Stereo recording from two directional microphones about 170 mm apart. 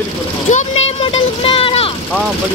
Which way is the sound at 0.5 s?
40° left (ahead or behind).